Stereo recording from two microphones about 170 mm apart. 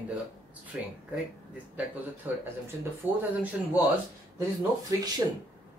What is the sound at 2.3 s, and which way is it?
Speech, 10° right (ahead or behind).